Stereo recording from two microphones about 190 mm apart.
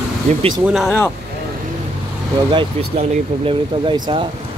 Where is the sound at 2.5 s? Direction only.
25° right (ahead or behind).